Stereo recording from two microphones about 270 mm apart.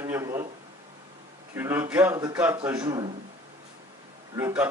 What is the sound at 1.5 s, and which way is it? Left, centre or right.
A man's voice, centre.